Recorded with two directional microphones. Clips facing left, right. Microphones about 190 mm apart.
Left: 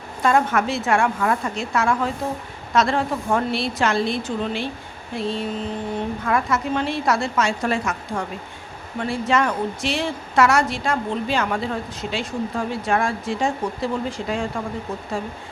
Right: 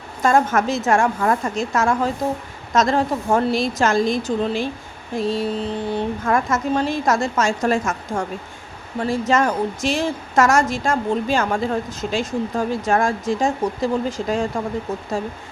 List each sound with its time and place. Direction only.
0.2 s a woman's voice: 45° right (ahead or behind)